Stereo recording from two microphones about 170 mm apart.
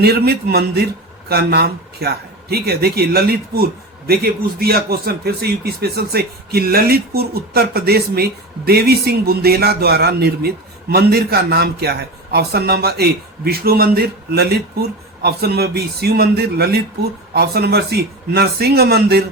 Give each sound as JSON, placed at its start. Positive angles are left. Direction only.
{"t": 0.0, "sound": "speech", "side_deg": -65}